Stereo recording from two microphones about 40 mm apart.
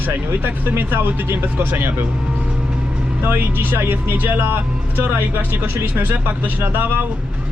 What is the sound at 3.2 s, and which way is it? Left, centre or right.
Speech, right.